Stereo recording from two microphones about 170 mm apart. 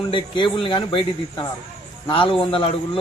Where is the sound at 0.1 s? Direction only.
30° left (ahead or behind).